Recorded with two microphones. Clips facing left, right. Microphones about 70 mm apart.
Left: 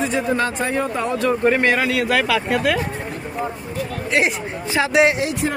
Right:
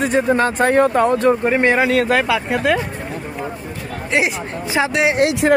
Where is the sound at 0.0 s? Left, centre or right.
Right.